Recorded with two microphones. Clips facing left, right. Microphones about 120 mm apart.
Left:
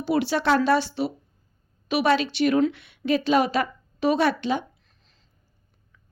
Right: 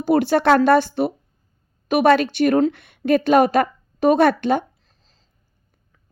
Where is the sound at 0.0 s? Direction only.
50° right (ahead or behind).